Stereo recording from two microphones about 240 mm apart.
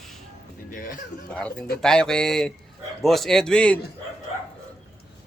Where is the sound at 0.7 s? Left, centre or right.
Left.